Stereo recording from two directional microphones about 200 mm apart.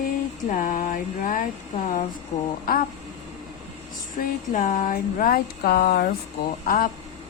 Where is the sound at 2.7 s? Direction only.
45° left (ahead or behind).